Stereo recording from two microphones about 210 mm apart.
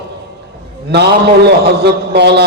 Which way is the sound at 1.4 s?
50° right (ahead or behind).